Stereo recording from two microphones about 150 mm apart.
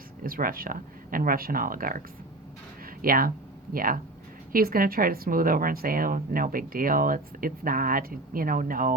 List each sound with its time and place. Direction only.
0.2 s a woman's voice: 70° right (ahead or behind)